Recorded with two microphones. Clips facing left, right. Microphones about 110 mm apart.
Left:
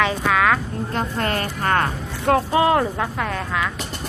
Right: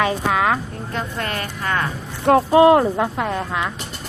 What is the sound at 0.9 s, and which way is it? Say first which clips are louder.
Speech: left 2 dB; 35° left (ahead or behind).